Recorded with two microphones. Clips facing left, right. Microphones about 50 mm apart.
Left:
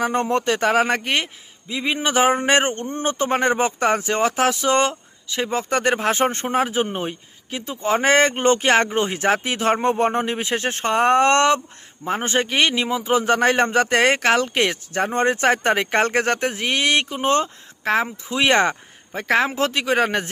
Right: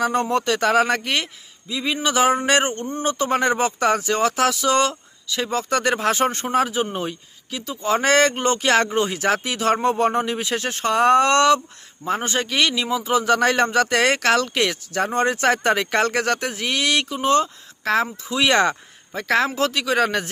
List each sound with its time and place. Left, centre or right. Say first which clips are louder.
0.0 s a man's voice: even; left
17.8 s a man's voice: even; left